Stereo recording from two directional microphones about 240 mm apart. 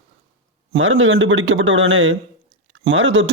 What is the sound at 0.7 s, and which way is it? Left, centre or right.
Speech, right.